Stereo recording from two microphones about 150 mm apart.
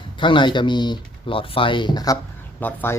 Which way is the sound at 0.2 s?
30° left (ahead or behind).